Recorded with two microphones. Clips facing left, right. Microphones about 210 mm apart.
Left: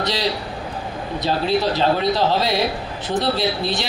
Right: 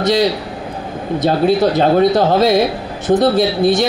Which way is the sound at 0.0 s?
45° right (ahead or behind).